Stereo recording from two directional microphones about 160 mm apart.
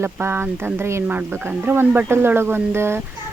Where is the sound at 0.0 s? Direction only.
15° right (ahead or behind).